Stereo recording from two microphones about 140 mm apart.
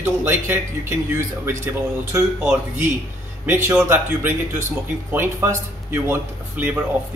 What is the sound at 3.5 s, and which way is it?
A man's voice, 15° right (ahead or behind).